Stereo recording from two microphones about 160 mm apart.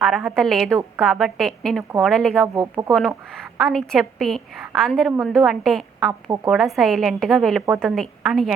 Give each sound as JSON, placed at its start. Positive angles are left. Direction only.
{"t": 0.0, "sound": "a woman's voice", "side_deg": 0}
{"t": 2.6, "sound": "speech", "side_deg": -20}
{"t": 2.9, "sound": "a woman's voice", "side_deg": 0}